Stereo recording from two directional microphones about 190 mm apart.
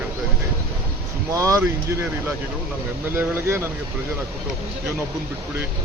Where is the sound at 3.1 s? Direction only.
15° right (ahead or behind).